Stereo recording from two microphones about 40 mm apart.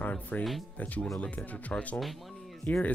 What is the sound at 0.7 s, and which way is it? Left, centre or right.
Speech, left.